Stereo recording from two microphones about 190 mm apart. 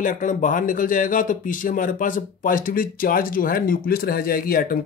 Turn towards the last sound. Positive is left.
turn(degrees=50)  # may be behind; listen again after turning